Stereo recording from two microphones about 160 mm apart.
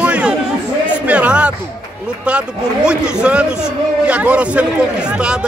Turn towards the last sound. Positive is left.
turn(degrees=-5)  # may be behind; listen again after turning